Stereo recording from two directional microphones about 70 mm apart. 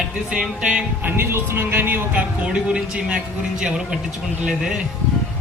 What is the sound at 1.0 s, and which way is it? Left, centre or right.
Speech, right.